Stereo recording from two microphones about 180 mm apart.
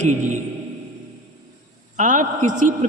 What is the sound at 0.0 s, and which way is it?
Speech, 40° right (ahead or behind).